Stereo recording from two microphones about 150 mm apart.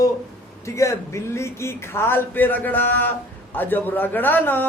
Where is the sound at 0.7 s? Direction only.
20° left (ahead or behind).